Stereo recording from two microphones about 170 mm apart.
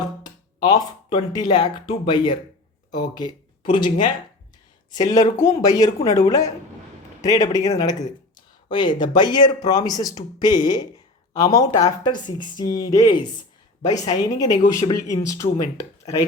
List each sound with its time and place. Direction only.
0.2 s speech: 25° left (ahead or behind)
5.2 s speech: 45° left (ahead or behind)
5.6 s speech: 20° left (ahead or behind)